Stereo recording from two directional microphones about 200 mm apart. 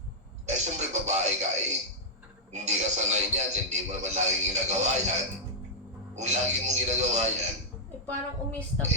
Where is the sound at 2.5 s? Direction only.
35° right (ahead or behind).